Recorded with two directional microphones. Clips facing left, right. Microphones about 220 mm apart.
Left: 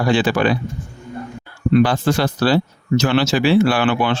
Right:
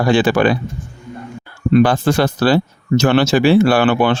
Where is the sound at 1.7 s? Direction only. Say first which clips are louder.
Right 2 dB; 50° right (ahead or behind).